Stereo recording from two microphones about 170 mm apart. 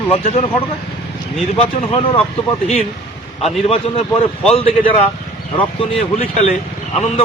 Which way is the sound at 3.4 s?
35° left (ahead or behind).